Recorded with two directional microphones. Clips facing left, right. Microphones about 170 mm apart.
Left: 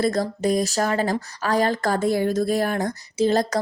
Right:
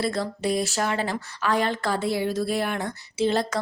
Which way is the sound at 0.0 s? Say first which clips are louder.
Left 4 dB; 40° left (ahead or behind).